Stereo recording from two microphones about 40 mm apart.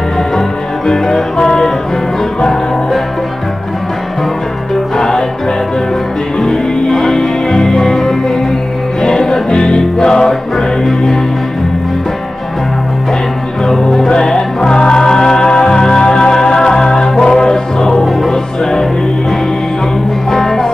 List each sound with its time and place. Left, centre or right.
0.8 s music: centre
4.9 s music: centre
6.9 s music: centre
14.0 s music: centre
20.2 s music: centre